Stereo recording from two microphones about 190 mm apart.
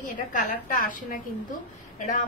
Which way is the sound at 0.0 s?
45° left (ahead or behind).